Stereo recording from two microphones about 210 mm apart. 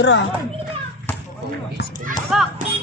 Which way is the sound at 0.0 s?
60° left (ahead or behind).